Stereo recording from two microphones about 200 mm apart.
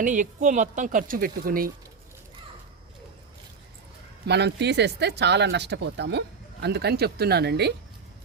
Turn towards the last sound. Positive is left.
turn(degrees=-55)  # may be behind; listen again after turning